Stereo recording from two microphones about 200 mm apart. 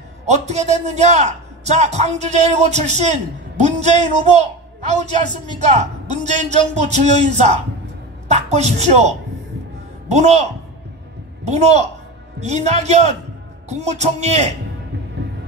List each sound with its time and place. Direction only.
0.5 s a man's voice: 35° right (ahead or behind)
11.4 s a man's voice: 35° right (ahead or behind)